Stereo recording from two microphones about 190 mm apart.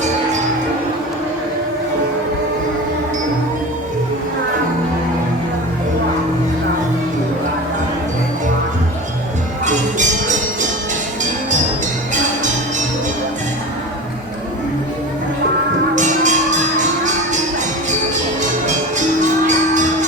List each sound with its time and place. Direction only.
9.6 s music: 40° right (ahead or behind)
12.1 s music: 40° right (ahead or behind)
16.0 s tambourine: 40° right (ahead or behind)
18.6 s music: 40° right (ahead or behind)